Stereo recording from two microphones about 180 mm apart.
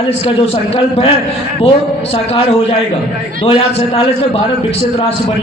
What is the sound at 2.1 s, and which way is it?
A man's voice, 30° left (ahead or behind).